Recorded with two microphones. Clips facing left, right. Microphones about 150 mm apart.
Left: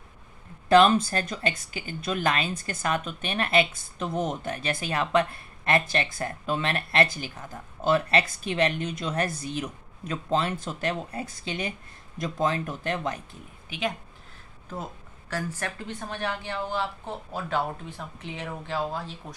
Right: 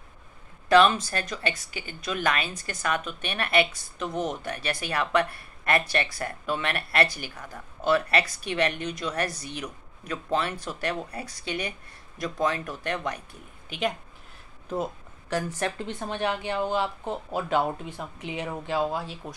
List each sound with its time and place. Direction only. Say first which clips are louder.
0.7 s speech: left 1 dB; 30° left (ahead or behind)
4.1 s speech: left 1 dB; centre (ahead or behind)
4.5 s speech: left 1 dB; 25° left (ahead or behind)
13.7 s a woman's voice: right 2 dB; centre (ahead or behind)
14.7 s speech: right 7 dB; 20° right (ahead or behind)